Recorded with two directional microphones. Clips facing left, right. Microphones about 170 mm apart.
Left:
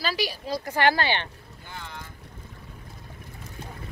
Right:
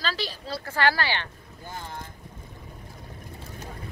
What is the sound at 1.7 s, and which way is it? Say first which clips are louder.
Boat: right 3 dB; 40° right (ahead or behind).